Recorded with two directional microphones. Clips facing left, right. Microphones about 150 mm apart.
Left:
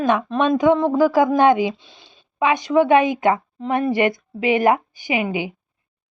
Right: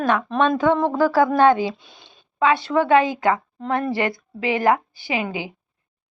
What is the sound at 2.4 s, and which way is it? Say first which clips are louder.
A woman's voice: left 2 dB; 15° left (ahead or behind).